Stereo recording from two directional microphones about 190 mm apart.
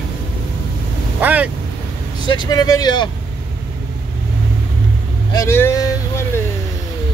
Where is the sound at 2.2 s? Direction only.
25° left (ahead or behind).